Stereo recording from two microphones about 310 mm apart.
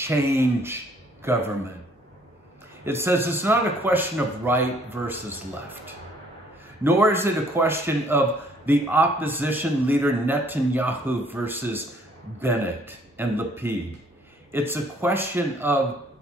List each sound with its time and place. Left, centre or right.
0.0 s a man's voice: centre
2.8 s a man's voice: centre